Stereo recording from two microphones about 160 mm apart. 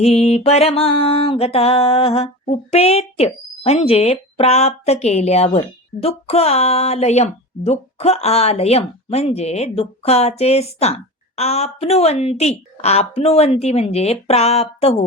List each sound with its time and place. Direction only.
0.0 s music: 40° left (ahead or behind)